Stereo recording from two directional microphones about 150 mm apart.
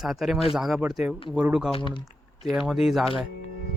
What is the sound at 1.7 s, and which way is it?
Speech, 35° left (ahead or behind).